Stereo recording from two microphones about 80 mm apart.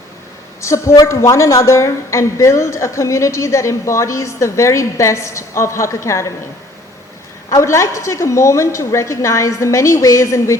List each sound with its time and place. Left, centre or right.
0.6 s a woman's voice: left
7.5 s a woman's voice: left